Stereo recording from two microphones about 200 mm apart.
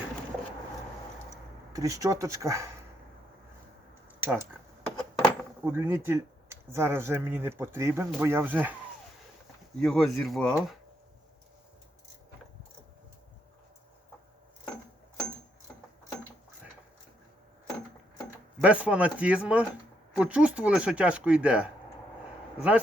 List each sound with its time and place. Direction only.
1.7 s speech: 15° right (ahead or behind)
4.2 s speech: 10° right (ahead or behind)
4.9 s a sound: 5° left (ahead or behind)
5.6 s speech: 10° right (ahead or behind)
9.8 s speech: centre (ahead or behind)
18.6 s speech: 5° right (ahead or behind)